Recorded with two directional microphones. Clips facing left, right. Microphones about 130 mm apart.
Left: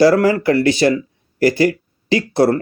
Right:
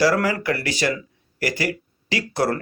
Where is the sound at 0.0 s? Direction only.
25° left (ahead or behind).